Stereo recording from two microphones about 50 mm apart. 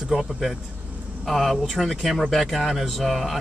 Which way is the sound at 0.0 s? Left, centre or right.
Centre.